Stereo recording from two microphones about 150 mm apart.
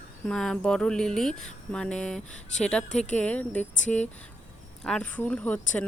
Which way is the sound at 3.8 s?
50° left (ahead or behind).